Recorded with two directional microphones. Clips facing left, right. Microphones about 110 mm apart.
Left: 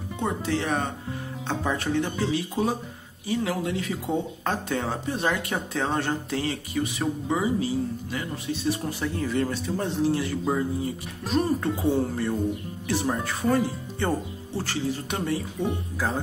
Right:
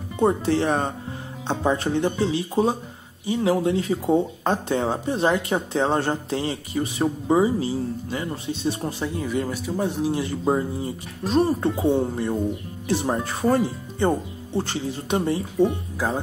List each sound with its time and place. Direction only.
0.2 s speech: 35° right (ahead or behind)
9.0 s speech: 15° right (ahead or behind)